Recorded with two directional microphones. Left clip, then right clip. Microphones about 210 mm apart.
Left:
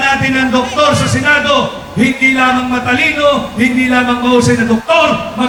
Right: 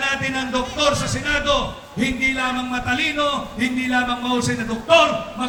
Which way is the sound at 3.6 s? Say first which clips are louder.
Left 9 dB; 35° right (ahead or behind).